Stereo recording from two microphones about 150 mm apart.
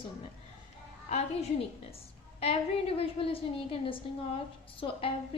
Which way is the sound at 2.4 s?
40° left (ahead or behind).